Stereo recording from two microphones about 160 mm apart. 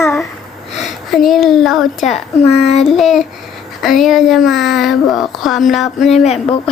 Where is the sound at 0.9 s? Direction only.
Centre (ahead or behind).